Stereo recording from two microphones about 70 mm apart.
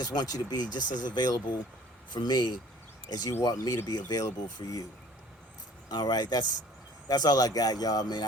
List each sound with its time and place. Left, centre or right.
0.0 s a man's voice: left
3.4 s speech: left
5.9 s speech: left